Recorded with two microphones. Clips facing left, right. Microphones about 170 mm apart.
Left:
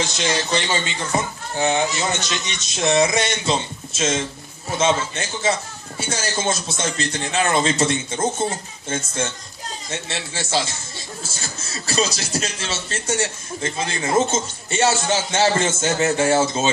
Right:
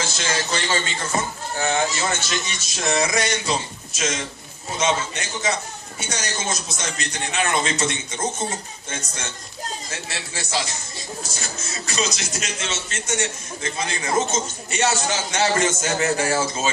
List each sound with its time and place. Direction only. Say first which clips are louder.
0.0 s speech: left 3 dB; 20° left (ahead or behind)